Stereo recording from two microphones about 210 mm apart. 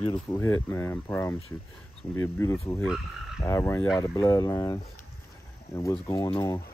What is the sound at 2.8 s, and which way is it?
Frog, centre (ahead or behind).